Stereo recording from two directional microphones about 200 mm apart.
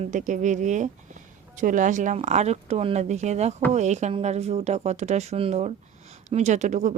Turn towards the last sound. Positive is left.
turn(degrees=-35)  # may be behind; listen again after turning